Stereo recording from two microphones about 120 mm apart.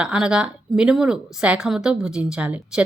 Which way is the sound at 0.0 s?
5° right (ahead or behind).